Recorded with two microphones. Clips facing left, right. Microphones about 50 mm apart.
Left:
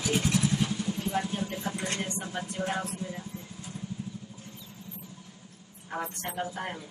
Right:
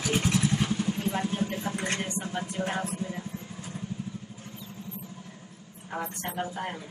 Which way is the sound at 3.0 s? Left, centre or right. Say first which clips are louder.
Right 3 dB; right.